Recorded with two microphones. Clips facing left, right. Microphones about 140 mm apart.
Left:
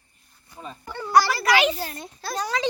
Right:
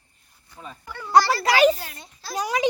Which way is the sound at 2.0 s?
55° left (ahead or behind).